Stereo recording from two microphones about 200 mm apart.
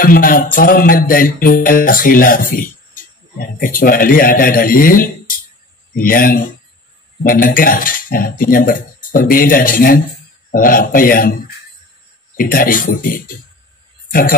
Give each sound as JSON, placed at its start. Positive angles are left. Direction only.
{"t": 0.0, "sound": "music", "side_deg": 45}